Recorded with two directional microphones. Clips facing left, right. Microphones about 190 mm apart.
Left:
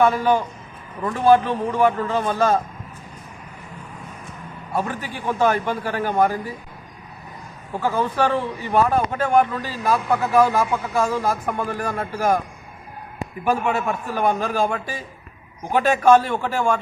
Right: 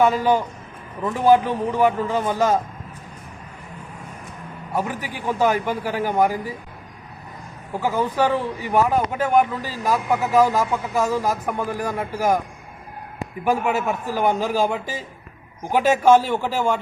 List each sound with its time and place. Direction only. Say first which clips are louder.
0.0 s a man's voice: even; 15° right (ahead or behind)
4.7 s a man's voice: even; 15° right (ahead or behind)
7.7 s a man's voice: even; 15° right (ahead or behind)
13.4 s a man's voice: even; 10° right (ahead or behind)
15.7 s a man's voice: even; 10° right (ahead or behind)